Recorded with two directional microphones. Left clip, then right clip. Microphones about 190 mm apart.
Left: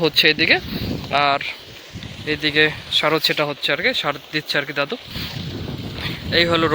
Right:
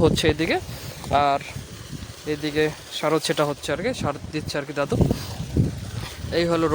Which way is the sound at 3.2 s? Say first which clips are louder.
Left 4 dB; 20° right (ahead or behind).